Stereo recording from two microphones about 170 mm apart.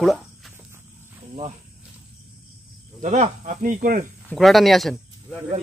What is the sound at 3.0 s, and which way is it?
Speech, 45° right (ahead or behind).